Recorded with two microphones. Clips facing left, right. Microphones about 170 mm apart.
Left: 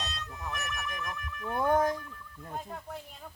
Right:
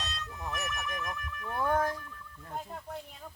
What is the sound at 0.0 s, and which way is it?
Car alarm, centre (ahead or behind).